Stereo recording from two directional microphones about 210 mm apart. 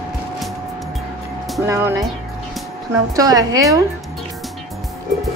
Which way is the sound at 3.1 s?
15° right (ahead or behind).